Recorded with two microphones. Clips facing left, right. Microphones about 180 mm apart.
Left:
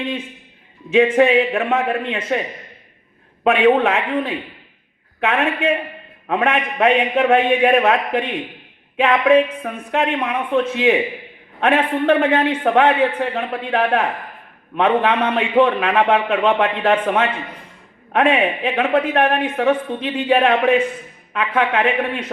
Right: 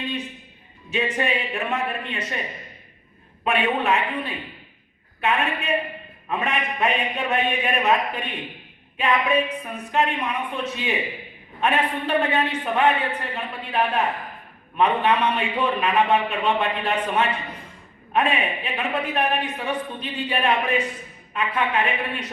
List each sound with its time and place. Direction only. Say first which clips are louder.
0.9 s a man's voice: left 11 dB; 90° left
3.4 s a man's voice: left 9 dB; 90° left